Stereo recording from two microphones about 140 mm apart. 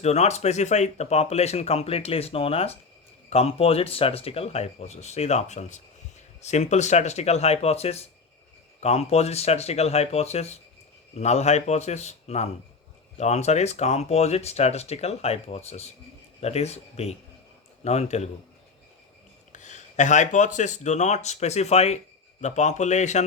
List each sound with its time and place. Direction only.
0.0 s speech: 50° left (ahead or behind)
19.5 s speech: 60° left (ahead or behind)